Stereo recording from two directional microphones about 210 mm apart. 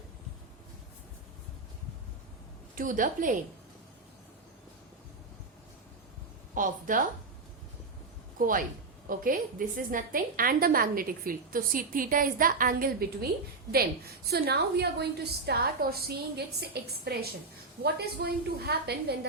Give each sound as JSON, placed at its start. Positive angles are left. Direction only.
{"t": 2.7, "sound": "a woman's voice", "side_deg": -40}
{"t": 6.5, "sound": "a woman's voice", "side_deg": -40}
{"t": 8.4, "sound": "a woman's voice", "side_deg": -40}